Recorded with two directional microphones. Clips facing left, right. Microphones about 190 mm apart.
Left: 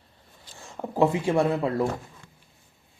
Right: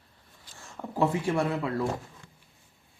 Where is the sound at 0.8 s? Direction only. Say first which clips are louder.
Left 4 dB; 20° left (ahead or behind).